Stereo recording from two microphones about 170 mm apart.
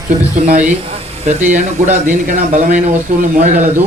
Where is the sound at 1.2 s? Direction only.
50° right (ahead or behind).